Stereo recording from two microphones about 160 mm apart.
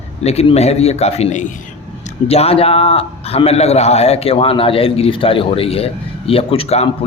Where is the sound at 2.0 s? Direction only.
40° left (ahead or behind).